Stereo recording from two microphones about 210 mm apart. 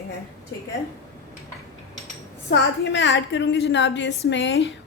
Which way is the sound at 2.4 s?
55° left (ahead or behind).